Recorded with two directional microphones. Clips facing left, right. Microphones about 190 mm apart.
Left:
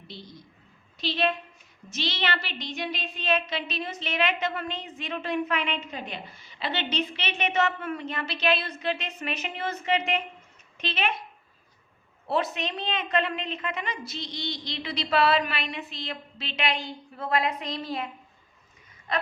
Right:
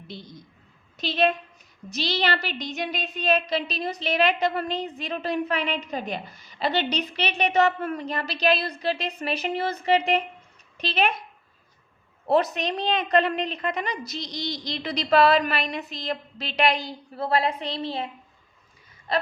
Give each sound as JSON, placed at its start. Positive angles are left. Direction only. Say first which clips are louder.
{"t": 0.9, "sound": "a woman's voice", "louder": "right 4 dB", "side_deg": -45}
{"t": 12.3, "sound": "a woman's voice", "louder": "right 6 dB", "side_deg": -40}
{"t": 19.1, "sound": "wheeze", "louder": "right 4 dB", "side_deg": -35}